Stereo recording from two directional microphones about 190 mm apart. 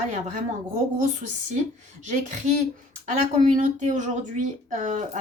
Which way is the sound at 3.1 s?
40° right (ahead or behind).